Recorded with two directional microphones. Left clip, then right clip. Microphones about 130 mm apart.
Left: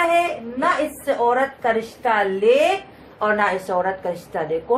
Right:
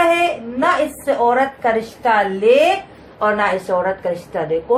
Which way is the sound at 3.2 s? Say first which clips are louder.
Right 3 dB; 30° left (ahead or behind).